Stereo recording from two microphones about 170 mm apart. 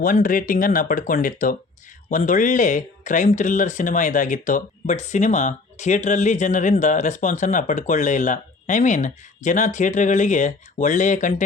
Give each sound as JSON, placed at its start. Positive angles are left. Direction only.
{"t": 0.0, "sound": "speech", "side_deg": 55}